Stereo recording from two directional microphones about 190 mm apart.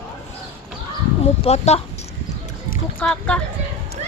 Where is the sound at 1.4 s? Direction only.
35° left (ahead or behind).